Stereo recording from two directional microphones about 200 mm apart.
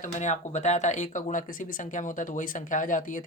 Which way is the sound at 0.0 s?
35° left (ahead or behind).